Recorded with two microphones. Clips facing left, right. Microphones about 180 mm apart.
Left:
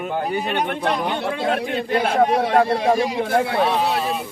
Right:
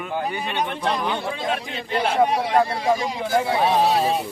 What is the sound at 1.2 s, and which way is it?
A man's voice, 65° left (ahead or behind).